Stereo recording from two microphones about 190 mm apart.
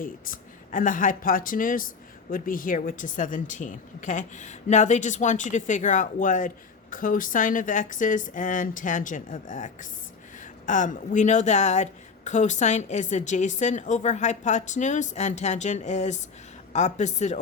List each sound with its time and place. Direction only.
0.0 s a woman's voice: 45° left (ahead or behind)